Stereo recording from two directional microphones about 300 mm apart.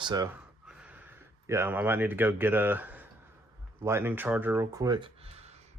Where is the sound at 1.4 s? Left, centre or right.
Centre.